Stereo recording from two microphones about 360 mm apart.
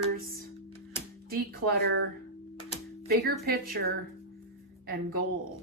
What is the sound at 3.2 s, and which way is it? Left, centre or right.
Speech, right.